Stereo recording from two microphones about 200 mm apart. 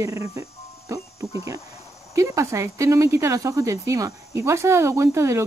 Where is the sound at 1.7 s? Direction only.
15° left (ahead or behind).